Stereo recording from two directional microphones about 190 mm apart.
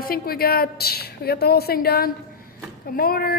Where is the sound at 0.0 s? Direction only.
50° left (ahead or behind).